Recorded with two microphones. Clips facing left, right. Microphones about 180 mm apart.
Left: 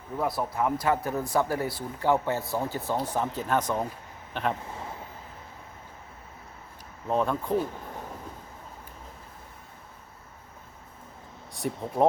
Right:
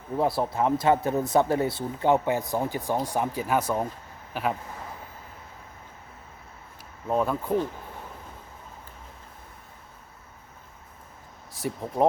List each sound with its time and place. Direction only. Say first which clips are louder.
0.2 s speech: right 3 dB; 30° right (ahead or behind); by 4.5 s 5° right (ahead or behind)
7.1 s speech: right 1 dB; 5° right (ahead or behind)
11.5 s speech: even; centre (ahead or behind)